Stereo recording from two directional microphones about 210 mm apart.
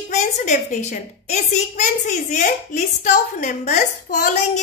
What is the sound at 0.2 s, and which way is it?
A woman's voice, 35° left (ahead or behind).